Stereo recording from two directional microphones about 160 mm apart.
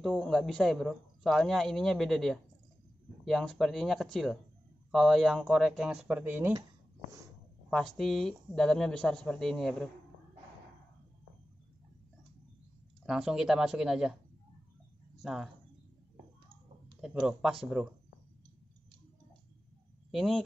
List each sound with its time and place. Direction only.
0.0 s speech: centre (ahead or behind)
7.7 s speech: 5° left (ahead or behind)
13.0 s speech: 5° right (ahead or behind)
15.2 s speech: centre (ahead or behind)
17.0 s speech: 5° right (ahead or behind)
20.1 s speech: centre (ahead or behind)